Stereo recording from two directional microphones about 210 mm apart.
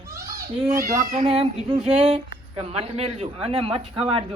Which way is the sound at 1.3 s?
25° right (ahead or behind).